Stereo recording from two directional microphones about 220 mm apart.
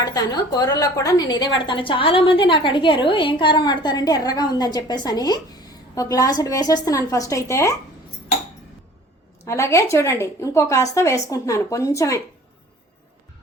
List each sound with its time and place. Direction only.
0.0 s a woman's voice: 20° left (ahead or behind)
9.4 s a woman's voice: 10° left (ahead or behind)